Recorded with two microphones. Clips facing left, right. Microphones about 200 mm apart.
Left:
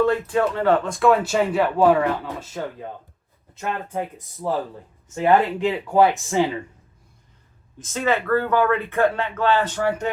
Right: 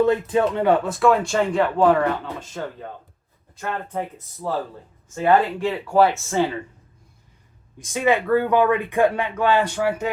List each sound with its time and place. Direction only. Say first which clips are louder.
0.0 s speech: right 1 dB; 20° right (ahead or behind); by 2.6 s 5° left (ahead or behind)
3.5 s speech: left 1 dB; 20° left (ahead or behind)
7.8 s speech: right 2 dB; 15° right (ahead or behind)